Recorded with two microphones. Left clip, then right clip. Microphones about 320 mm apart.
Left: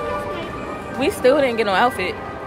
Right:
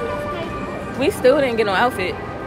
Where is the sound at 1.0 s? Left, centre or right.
Centre.